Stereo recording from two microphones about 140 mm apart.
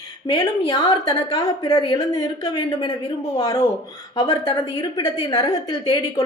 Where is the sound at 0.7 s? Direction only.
40° left (ahead or behind).